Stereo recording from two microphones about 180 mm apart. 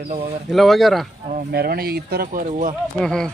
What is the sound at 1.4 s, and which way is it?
Speech, 60° right (ahead or behind).